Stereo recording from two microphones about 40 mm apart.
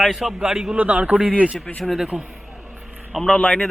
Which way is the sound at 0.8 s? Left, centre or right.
Right.